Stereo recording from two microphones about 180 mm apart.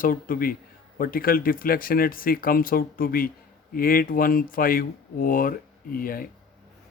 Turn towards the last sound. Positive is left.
turn(degrees=50)  # may be behind; listen again after turning